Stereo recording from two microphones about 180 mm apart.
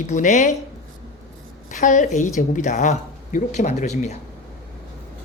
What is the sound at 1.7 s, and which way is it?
Speech, 45° left (ahead or behind).